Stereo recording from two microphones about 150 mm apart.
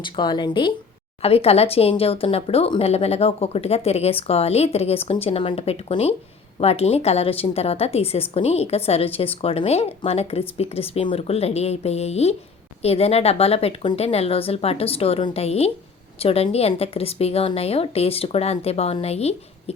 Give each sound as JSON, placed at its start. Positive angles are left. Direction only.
{"t": 0.0, "sound": "speech", "side_deg": 30}
{"t": 1.2, "sound": "speech", "side_deg": 40}